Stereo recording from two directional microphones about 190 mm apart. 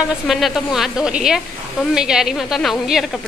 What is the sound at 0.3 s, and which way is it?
A woman's voice, centre (ahead or behind).